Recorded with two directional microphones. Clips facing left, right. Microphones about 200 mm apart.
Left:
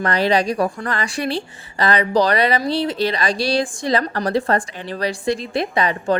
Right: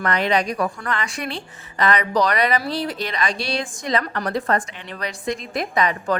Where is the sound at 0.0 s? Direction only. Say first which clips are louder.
Left 3 dB; 35° left (ahead or behind).